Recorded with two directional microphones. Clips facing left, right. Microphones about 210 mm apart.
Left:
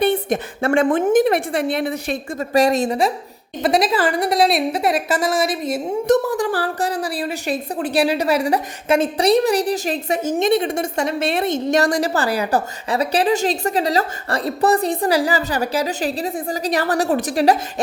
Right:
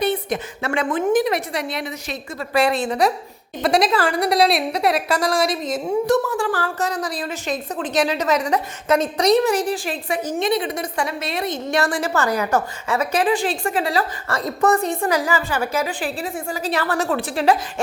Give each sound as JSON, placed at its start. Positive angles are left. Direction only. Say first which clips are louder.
{"t": 0.0, "sound": "a woman's voice", "louder": "left 3 dB", "side_deg": 50}
{"t": 2.5, "sound": "a woman's voice", "louder": "left 3 dB", "side_deg": 40}
{"t": 3.6, "sound": "a woman's voice", "louder": "left 1 dB", "side_deg": 0}
{"t": 6.1, "sound": "speech", "louder": "left 4 dB", "side_deg": 20}
{"t": 6.5, "sound": "a woman's voice", "louder": "left 2 dB", "side_deg": 35}
{"t": 7.2, "sound": "a woman's voice", "louder": "left 3 dB", "side_deg": 10}
{"t": 8.5, "sound": "a woman's voice", "louder": "left 1 dB", "side_deg": 30}
{"t": 11.7, "sound": "a woman's voice", "louder": "left 2 dB", "side_deg": 40}